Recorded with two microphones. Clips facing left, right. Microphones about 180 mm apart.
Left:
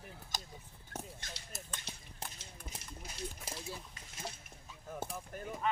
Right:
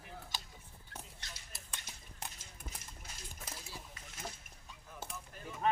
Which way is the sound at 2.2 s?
25° left (ahead or behind).